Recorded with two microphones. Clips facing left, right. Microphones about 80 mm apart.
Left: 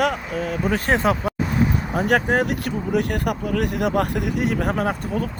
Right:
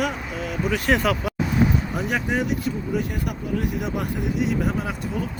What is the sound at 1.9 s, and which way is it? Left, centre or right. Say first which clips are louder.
Speech: left 5 dB; left.